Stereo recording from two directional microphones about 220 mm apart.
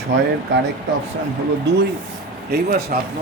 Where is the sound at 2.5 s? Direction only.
45° right (ahead or behind).